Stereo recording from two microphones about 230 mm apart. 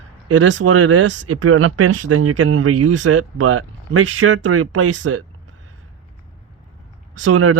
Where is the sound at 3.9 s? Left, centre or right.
Right.